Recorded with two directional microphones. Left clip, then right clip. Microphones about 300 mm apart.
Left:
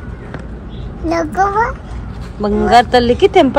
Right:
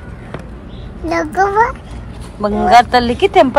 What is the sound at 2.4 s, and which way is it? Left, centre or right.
A woman's voice, centre.